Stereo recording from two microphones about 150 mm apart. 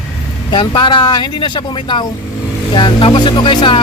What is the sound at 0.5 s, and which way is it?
Speech, 30° left (ahead or behind).